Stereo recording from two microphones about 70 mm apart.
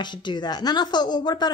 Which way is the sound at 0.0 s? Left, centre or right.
Left.